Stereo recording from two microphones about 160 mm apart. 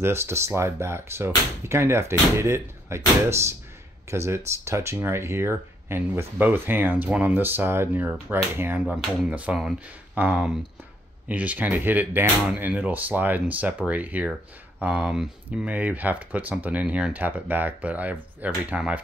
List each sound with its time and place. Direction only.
0.0 s speech: 15° right (ahead or behind)
8.8 s speech: 5° right (ahead or behind)